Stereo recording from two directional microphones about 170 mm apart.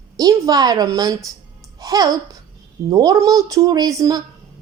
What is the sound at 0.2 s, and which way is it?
A child's voice, 20° right (ahead or behind).